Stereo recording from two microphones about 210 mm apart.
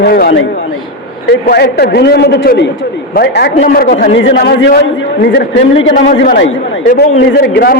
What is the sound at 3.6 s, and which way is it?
Speech, 40° left (ahead or behind).